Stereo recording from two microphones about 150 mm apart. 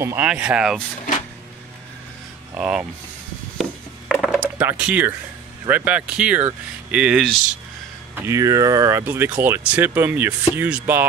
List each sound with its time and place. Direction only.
0.0 s speech: 15° right (ahead or behind)
2.5 s speech: 10° right (ahead or behind)
4.1 s a sound: 5° right (ahead or behind)
5.7 s speech: 10° right (ahead or behind)
8.1 s speech: 15° right (ahead or behind)